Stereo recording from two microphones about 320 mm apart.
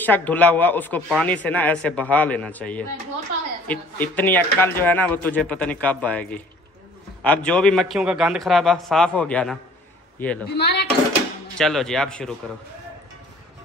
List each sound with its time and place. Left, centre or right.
0.0 s a woman's voice: centre
10.5 s speech: left
11.5 s speech: centre